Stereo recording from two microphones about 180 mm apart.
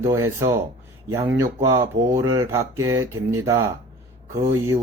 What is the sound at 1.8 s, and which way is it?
Speech, 25° right (ahead or behind).